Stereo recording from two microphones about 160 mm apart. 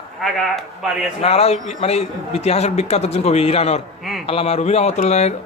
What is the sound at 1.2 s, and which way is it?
A man's voice, 40° left (ahead or behind).